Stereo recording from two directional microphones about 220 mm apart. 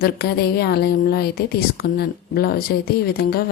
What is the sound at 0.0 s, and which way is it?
Speech, 45° left (ahead or behind).